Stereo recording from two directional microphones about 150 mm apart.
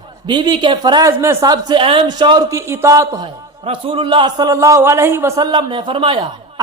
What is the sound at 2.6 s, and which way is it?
Speech, 20° right (ahead or behind).